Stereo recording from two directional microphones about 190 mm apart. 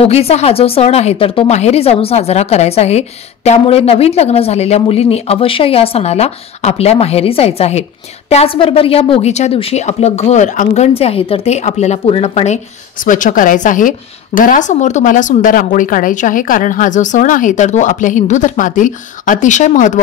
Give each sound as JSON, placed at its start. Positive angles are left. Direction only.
{"t": 0.0, "sound": "speech", "side_deg": 30}
{"t": 13.0, "sound": "speech", "side_deg": 45}